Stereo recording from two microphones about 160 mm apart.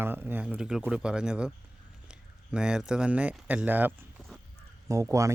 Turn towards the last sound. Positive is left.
turn(degrees=-20)  # may be behind; listen again after turning